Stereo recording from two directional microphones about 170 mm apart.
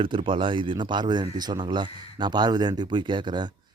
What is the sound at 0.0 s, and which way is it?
Speech, 30° right (ahead or behind).